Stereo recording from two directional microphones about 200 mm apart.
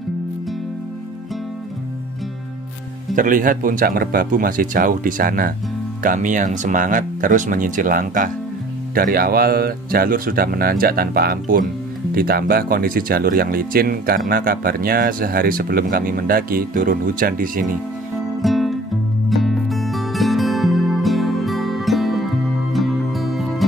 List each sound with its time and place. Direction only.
3.2 s speech: 40° right (ahead or behind)
18.4 s music: centre (ahead or behind)